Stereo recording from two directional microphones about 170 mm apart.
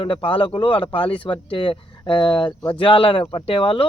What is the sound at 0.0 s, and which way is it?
Speech, 30° left (ahead or behind).